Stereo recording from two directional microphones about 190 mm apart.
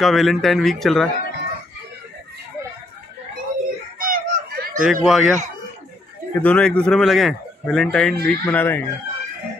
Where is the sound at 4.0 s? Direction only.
45° right (ahead or behind).